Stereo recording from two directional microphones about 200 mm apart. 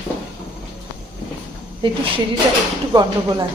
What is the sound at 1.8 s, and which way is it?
A woman's voice, 25° right (ahead or behind).